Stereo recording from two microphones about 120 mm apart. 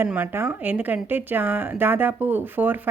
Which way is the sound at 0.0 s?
15° right (ahead or behind).